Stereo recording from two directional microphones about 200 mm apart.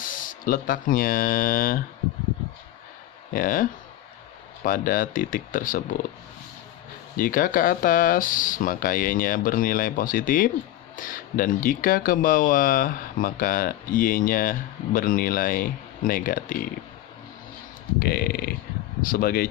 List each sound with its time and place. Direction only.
0.0 s speech: 40° left (ahead or behind)
3.3 s speech: 45° left (ahead or behind)
4.6 s speech: 45° left (ahead or behind)
7.2 s speech: 45° left (ahead or behind)
17.9 s speech: 50° left (ahead or behind)